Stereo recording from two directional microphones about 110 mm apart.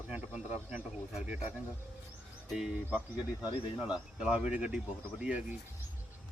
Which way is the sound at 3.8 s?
10° right (ahead or behind).